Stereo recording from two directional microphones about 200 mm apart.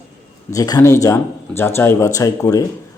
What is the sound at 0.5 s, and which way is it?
Speech, 15° left (ahead or behind).